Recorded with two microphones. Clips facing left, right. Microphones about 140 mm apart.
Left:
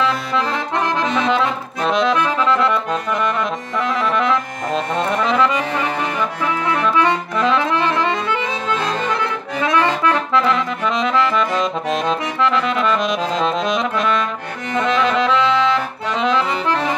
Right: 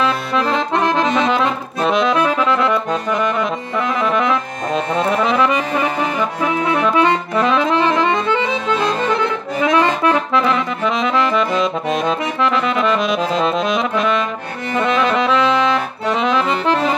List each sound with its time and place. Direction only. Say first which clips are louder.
0.5 s accordion: right 4 dB; 20° right (ahead or behind)
1.9 s accordion: right 1 dB; 10° right (ahead or behind)
3.3 s music: right 2 dB; 15° right (ahead or behind)
5.1 s accordion: even; 15° right (ahead or behind)
11.6 s saxophone: right 2 dB; 5° right (ahead or behind)
12.4 s accordion: even; 15° right (ahead or behind)